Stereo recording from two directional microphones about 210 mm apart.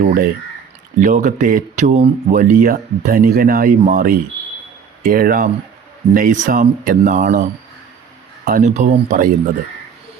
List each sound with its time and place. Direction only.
0.0 s speech: 45° right (ahead or behind)
8.4 s speech: 40° right (ahead or behind)